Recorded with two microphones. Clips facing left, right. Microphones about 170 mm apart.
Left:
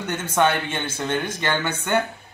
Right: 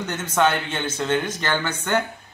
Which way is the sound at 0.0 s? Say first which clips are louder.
Even; 10° left (ahead or behind).